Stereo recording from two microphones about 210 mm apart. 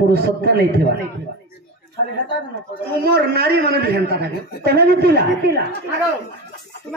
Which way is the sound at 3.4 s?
50° right (ahead or behind).